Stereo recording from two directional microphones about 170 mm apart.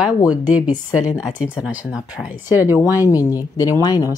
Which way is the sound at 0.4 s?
25° left (ahead or behind).